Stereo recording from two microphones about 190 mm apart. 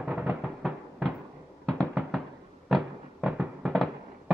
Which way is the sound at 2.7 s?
5° right (ahead or behind).